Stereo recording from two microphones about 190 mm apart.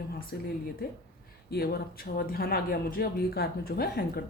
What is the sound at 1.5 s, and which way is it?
Speech, 55° left (ahead or behind).